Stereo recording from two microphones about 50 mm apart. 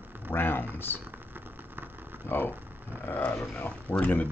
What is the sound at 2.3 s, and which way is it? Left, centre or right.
Speech, left.